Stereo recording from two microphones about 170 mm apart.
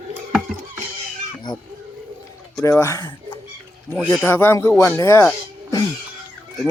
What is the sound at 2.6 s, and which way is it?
Speech, 15° left (ahead or behind).